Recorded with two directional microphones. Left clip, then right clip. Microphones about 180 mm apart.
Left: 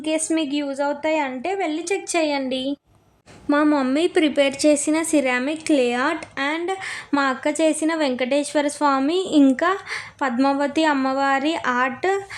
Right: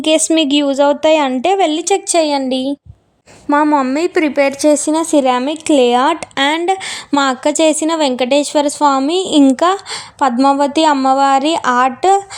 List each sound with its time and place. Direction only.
0.0 s a woman's voice: 55° right (ahead or behind); by 2.7 s 30° right (ahead or behind)
3.6 s a woman's voice: 5° right (ahead or behind)
3.9 s speech: 15° right (ahead or behind)
4.9 s a woman's voice: 35° right (ahead or behind); by 6.6 s 50° right (ahead or behind)
6.7 s a woman's voice: 35° right (ahead or behind)